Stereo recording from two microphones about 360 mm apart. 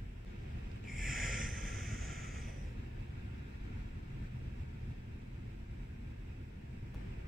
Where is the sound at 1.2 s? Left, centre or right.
Right.